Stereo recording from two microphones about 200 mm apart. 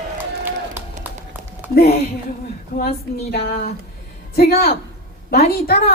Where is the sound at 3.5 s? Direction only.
45° left (ahead or behind).